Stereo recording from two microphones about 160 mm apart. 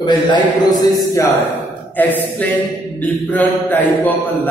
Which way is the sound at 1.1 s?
10° left (ahead or behind).